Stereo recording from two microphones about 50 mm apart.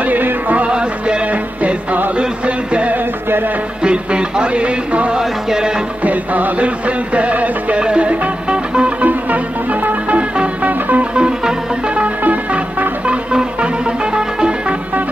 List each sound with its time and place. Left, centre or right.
0.0 s music: right
0.7 s music: centre
5.2 s music: centre
6.0 s music: right
9.0 s music: right
10.7 s music: right
11.1 s music: centre